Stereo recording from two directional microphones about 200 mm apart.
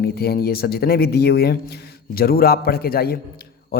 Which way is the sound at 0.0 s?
50° left (ahead or behind).